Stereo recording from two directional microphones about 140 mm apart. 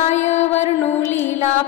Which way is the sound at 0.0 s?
55° left (ahead or behind).